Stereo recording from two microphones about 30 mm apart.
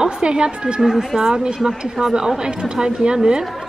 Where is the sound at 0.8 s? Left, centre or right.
Centre.